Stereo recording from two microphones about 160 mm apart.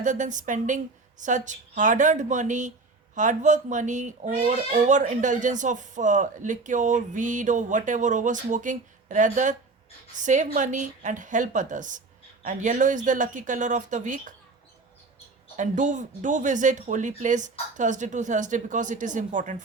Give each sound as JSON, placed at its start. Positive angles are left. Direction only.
{"t": 0.0, "sound": "speech", "side_deg": -50}
{"t": 15.5, "sound": "speech", "side_deg": -50}